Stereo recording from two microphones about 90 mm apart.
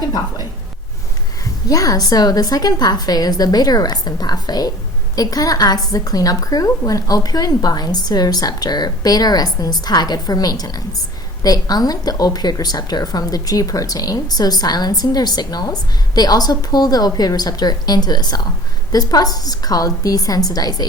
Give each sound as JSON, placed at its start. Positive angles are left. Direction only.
{"t": 1.6, "sound": "a woman's voice", "side_deg": 40}